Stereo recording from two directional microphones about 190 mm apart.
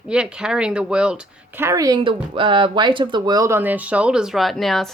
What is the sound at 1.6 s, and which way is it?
Speech, 15° right (ahead or behind).